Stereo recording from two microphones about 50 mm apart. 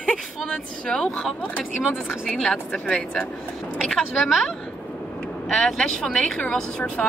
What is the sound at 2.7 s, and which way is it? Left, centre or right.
Speech, left.